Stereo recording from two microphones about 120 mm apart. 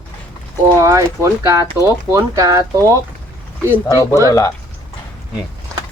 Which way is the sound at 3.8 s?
30° left (ahead or behind).